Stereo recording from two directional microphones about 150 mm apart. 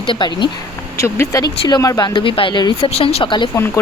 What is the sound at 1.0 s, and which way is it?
Speech, 20° left (ahead or behind).